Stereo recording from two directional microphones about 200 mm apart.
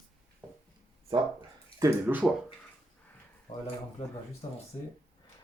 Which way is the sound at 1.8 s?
10° right (ahead or behind).